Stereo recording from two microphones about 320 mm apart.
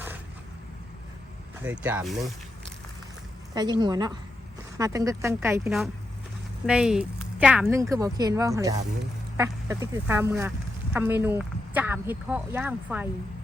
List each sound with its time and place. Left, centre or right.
1.6 s speech: centre
3.5 s speech: centre